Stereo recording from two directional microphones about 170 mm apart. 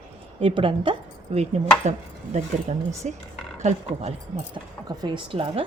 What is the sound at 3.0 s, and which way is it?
A woman's voice, 45° right (ahead or behind).